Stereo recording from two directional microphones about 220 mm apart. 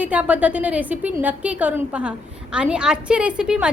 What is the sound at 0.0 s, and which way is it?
A woman's voice, 5° right (ahead or behind).